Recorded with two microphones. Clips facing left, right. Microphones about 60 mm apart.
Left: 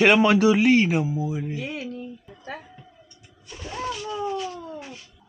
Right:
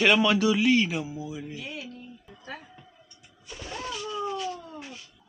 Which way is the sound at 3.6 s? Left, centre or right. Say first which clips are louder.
Left 5 dB; centre.